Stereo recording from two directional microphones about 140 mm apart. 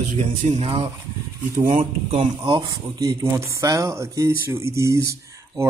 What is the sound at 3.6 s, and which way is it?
Speech, 25° right (ahead or behind).